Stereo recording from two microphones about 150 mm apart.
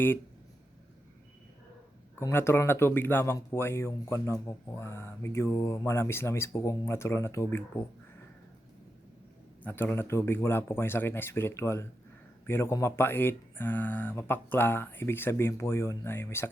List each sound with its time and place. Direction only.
2.1 s speech: 15° left (ahead or behind)
9.6 s speech: 15° left (ahead or behind)